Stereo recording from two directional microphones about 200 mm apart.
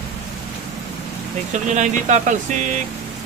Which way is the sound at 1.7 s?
35° right (ahead or behind).